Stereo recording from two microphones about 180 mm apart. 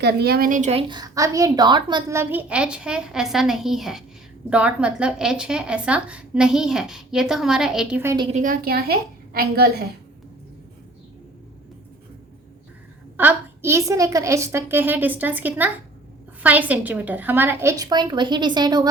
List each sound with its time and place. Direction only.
0.0 s a woman's voice: 60° right (ahead or behind); by 8.1 s 5° right (ahead or behind)
8.3 s a woman's voice: 50° right (ahead or behind)
13.1 s a woman's voice: 10° right (ahead or behind)